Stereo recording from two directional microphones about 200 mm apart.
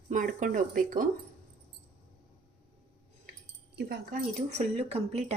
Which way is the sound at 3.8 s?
50° right (ahead or behind).